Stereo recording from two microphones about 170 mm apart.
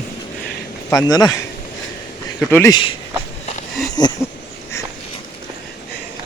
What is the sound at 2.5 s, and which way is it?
Speech, 15° left (ahead or behind).